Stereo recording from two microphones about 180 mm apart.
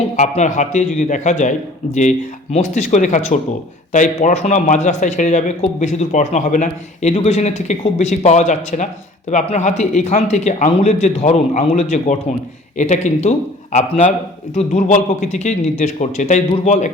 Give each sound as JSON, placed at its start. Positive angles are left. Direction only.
{"t": 0.2, "sound": "a man's voice", "side_deg": 45}